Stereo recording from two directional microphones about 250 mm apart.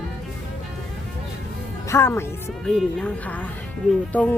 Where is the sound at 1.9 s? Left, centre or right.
Centre.